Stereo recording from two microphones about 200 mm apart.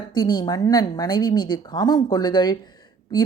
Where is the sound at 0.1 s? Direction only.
20° left (ahead or behind).